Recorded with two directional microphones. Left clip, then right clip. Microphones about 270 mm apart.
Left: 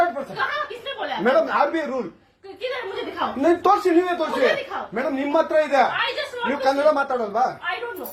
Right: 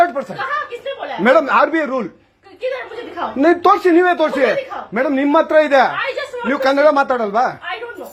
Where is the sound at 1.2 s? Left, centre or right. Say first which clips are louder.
Right 7 dB; right.